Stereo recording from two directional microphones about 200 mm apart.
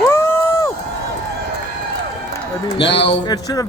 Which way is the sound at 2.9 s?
25° left (ahead or behind).